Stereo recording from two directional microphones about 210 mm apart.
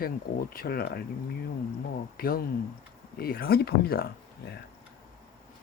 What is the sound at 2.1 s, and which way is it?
Speech, 45° left (ahead or behind).